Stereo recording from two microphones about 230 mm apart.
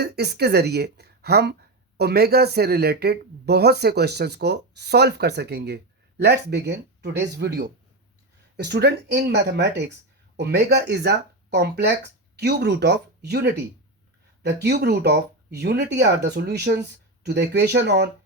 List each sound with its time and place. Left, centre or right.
0.0 s speech: right